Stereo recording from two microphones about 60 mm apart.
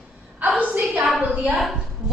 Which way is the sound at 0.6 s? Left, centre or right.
Right.